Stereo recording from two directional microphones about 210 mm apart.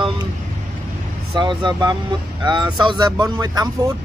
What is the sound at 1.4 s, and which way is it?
Speech, 20° right (ahead or behind).